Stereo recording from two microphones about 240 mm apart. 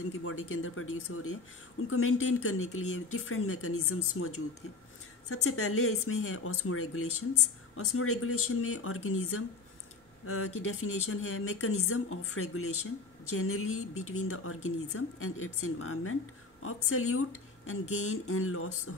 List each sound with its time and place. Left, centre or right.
0.2 s a woman's voice: left
5.3 s a woman's voice: left